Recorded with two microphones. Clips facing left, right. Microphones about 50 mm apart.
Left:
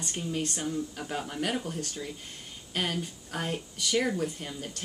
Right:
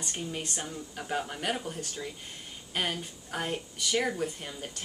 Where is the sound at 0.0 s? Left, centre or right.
Centre.